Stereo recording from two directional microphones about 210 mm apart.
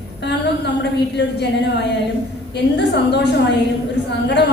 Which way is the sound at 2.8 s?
55° left (ahead or behind).